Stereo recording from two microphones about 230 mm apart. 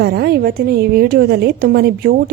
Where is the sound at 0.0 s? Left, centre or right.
Right.